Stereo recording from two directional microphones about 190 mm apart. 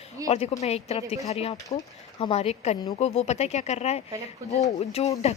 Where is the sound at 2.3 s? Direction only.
35° left (ahead or behind).